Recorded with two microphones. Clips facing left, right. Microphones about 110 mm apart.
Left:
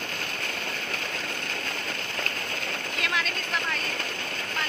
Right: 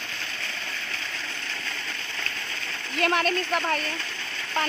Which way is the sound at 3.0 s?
50° right (ahead or behind).